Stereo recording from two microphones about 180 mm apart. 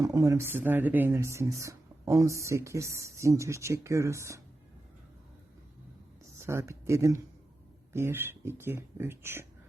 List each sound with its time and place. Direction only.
0.0 s speech: 20° right (ahead or behind)
6.4 s speech: 15° right (ahead or behind)